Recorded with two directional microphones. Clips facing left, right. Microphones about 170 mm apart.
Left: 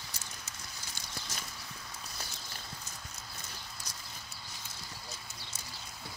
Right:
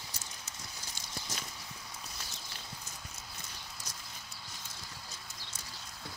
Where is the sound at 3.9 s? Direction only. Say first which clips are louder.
Even; 50° right (ahead or behind).